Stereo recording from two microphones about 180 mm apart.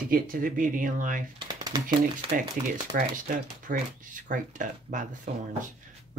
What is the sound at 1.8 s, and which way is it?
Speech, 55° right (ahead or behind).